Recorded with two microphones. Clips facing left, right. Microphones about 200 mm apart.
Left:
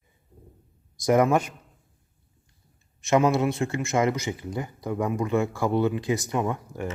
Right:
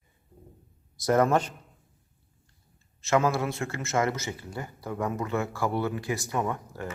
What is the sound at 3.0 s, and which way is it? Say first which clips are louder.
Speech: left 4 dB; 20° left (ahead or behind).